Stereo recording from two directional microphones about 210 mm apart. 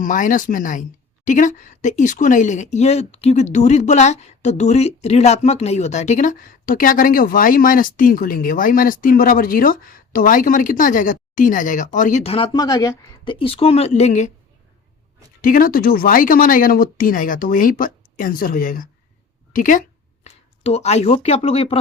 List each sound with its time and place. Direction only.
0.0 s speech: 40° left (ahead or behind)
15.4 s speech: 40° left (ahead or behind)